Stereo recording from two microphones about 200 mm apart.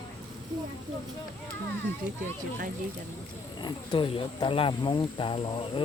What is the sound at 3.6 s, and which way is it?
Speech, 25° left (ahead or behind).